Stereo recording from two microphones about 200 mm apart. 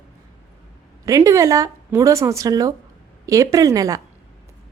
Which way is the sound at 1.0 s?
15° right (ahead or behind).